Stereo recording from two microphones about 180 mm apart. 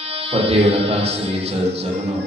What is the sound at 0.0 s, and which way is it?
Music, 35° right (ahead or behind).